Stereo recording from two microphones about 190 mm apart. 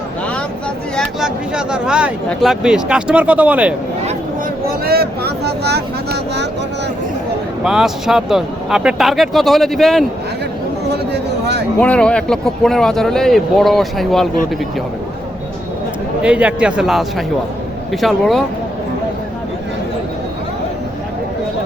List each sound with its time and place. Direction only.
0.9 s speech: 5° right (ahead or behind)
4.9 s vehicle: 55° right (ahead or behind)
7.6 s speech: 5° right (ahead or behind)
11.8 s speech: 5° left (ahead or behind)
16.2 s speech: 5° right (ahead or behind)